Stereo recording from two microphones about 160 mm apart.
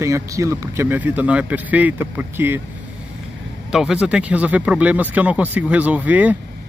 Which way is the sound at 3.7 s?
5° right (ahead or behind).